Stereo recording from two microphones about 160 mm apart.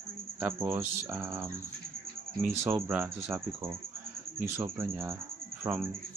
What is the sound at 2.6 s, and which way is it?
Speech, 15° right (ahead or behind).